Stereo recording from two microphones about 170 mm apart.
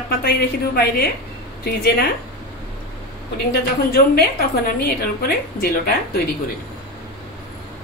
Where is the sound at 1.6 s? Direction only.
70° left (ahead or behind).